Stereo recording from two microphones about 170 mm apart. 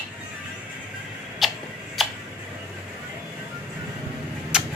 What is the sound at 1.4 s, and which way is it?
Tick-tock, centre (ahead or behind).